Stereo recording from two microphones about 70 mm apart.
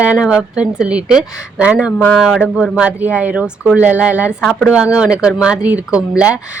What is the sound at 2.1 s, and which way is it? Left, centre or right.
Speech, centre.